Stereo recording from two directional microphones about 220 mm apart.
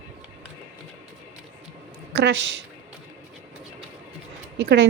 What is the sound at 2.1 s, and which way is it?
Speech, 50° right (ahead or behind).